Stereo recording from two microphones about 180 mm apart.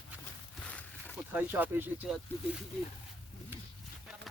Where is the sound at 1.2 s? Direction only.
10° right (ahead or behind).